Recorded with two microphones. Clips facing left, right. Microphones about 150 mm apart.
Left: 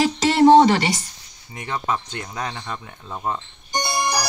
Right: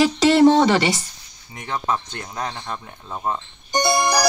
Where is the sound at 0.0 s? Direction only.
80° right.